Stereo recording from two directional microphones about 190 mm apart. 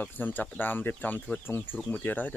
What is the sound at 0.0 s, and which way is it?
Speech, 10° left (ahead or behind).